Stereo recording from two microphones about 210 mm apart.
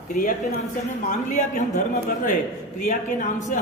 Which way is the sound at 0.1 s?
40° left (ahead or behind).